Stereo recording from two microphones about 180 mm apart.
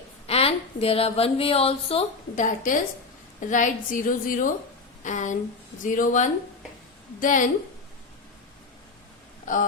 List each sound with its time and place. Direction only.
0.3 s a woman's voice: 35° left (ahead or behind)
9.5 s a woman's voice: 45° left (ahead or behind)